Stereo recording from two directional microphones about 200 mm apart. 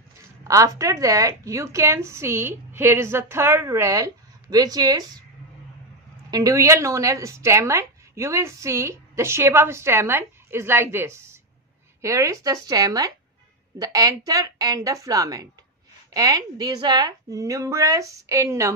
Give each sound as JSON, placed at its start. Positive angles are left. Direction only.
{"t": 0.4, "sound": "a woman's voice", "side_deg": -15}
{"t": 6.3, "sound": "a woman's voice", "side_deg": -15}